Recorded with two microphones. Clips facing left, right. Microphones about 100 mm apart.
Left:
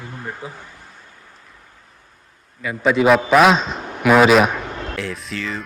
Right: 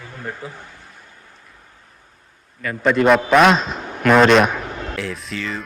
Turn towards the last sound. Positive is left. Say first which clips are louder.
# even
turn(degrees=0)  # may be behind; listen again after turning